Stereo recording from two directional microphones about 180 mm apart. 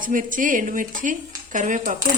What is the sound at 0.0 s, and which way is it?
Dishes, 50° right (ahead or behind).